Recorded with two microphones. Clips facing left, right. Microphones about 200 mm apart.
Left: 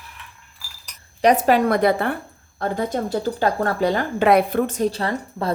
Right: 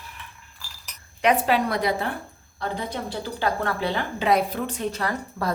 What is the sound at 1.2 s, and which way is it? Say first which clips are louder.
A woman's voice: left 5 dB; 40° left (ahead or behind).